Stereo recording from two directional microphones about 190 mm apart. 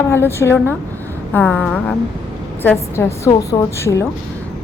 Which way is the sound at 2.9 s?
15° left (ahead or behind).